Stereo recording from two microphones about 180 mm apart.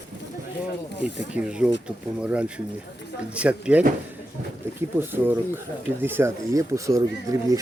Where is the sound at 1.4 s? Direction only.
5° right (ahead or behind).